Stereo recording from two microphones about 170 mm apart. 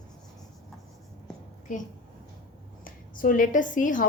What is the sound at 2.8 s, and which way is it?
A woman's voice, 55° left (ahead or behind).